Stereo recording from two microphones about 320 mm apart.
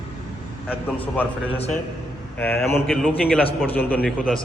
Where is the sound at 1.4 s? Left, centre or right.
Centre.